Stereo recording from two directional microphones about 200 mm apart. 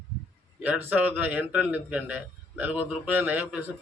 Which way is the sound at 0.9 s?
10° right (ahead or behind).